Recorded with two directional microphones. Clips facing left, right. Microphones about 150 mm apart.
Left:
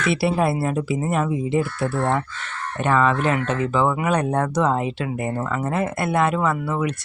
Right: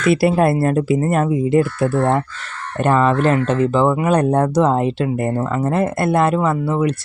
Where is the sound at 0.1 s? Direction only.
50° right (ahead or behind).